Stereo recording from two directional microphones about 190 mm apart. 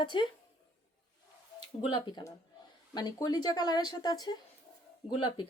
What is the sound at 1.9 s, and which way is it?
Speech, 25° left (ahead or behind).